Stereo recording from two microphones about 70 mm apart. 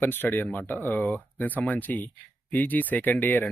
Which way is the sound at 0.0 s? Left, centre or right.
Left.